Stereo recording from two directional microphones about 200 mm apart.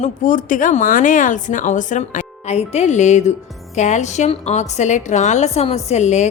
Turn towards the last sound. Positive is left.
turn(degrees=35)  # may be behind; listen again after turning